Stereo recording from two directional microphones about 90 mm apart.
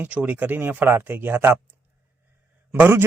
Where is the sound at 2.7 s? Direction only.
25° right (ahead or behind).